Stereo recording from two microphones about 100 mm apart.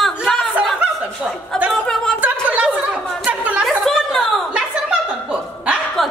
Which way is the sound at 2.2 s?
15° right (ahead or behind).